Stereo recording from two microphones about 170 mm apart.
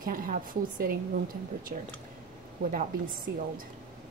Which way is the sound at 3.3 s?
70° right (ahead or behind).